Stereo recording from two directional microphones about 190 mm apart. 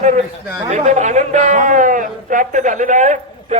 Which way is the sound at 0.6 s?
40° right (ahead or behind).